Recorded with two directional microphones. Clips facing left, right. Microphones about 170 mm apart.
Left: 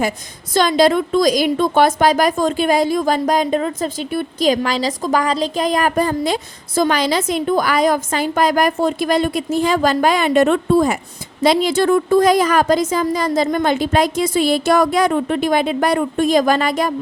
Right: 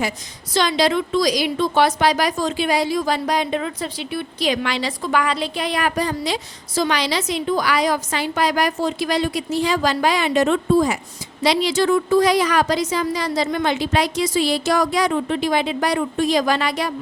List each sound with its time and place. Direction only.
0.5 s a woman's voice: 50° left (ahead or behind)